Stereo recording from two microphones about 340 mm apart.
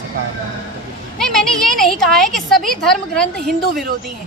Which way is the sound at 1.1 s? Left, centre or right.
Centre.